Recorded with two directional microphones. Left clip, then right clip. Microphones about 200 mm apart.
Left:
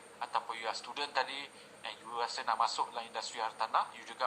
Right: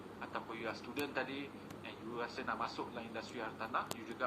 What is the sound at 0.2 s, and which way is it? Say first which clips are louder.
A man's voice: left 8 dB; 20° left (ahead or behind).